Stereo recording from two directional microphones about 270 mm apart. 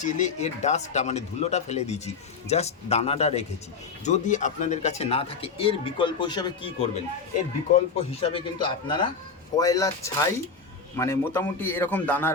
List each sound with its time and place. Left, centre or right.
0.0 s a man's voice: left; by 12.3 s centre